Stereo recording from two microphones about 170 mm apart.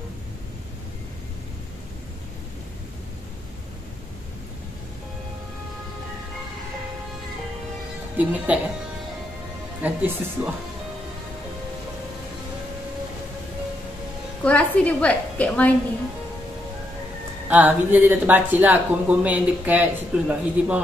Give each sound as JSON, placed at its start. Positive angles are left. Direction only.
{"t": 8.2, "sound": "speech", "side_deg": -10}
{"t": 9.8, "sound": "speech", "side_deg": -10}
{"t": 14.4, "sound": "a woman's voice", "side_deg": 10}
{"t": 17.5, "sound": "speech", "side_deg": -10}